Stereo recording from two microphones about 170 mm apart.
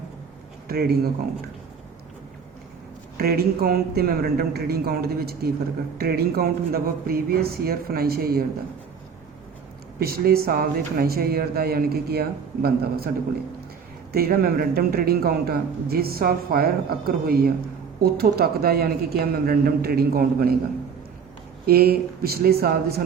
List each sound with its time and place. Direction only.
0.7 s speech: 65° right (ahead or behind)
3.2 s speech: 65° right (ahead or behind)
10.0 s speech: 65° right (ahead or behind)
14.1 s speech: 65° right (ahead or behind)
21.7 s speech: 65° right (ahead or behind)